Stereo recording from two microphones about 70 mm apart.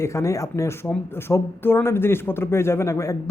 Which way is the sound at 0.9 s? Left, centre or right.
Left.